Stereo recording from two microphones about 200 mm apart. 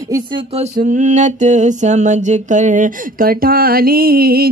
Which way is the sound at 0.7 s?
40° right (ahead or behind).